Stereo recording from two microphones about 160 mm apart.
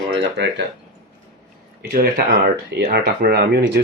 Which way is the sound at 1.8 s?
70° right (ahead or behind).